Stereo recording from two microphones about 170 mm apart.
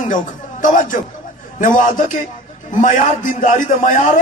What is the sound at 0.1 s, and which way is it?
A man's voice, 50° left (ahead or behind).